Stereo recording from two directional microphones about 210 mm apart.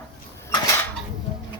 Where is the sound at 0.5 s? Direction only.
15° left (ahead or behind).